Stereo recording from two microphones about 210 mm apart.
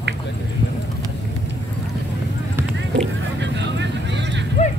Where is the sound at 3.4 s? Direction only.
55° right (ahead or behind).